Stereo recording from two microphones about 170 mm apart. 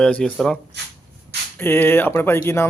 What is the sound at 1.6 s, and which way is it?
Speech, 15° left (ahead or behind).